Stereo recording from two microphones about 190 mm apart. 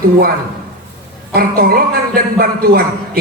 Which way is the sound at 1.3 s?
50° right (ahead or behind).